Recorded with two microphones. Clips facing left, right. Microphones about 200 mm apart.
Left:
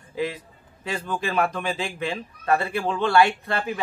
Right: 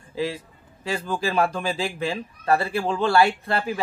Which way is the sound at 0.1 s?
30° right (ahead or behind).